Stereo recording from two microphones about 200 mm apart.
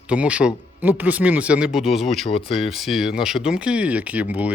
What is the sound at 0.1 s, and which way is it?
Speech, 5° right (ahead or behind).